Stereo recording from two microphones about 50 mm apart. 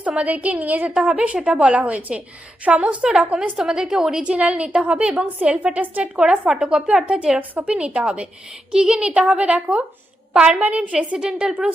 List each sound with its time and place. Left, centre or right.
0.0 s a woman's voice: right
3.2 s a woman's voice: right
3.6 s a woman's voice: centre
4.2 s a woman's voice: right